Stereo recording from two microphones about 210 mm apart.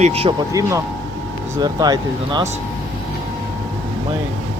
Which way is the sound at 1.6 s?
20° right (ahead or behind).